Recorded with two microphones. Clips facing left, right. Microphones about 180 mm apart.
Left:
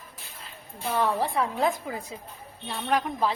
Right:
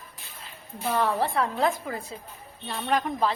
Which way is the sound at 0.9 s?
10° left (ahead or behind).